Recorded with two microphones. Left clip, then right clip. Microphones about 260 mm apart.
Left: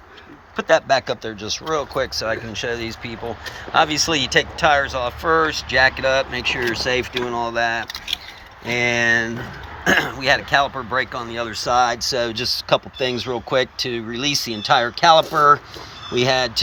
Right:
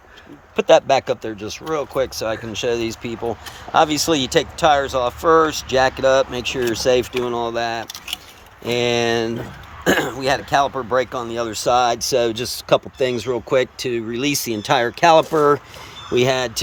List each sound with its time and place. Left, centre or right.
0.5 s speech: right
16.1 s speech: right